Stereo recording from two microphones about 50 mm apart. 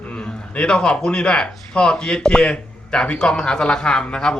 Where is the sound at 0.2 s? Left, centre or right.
Left.